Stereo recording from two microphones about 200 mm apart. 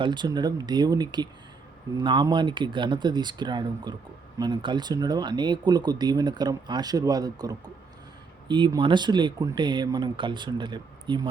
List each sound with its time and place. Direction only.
0.0 s speech: 20° right (ahead or behind)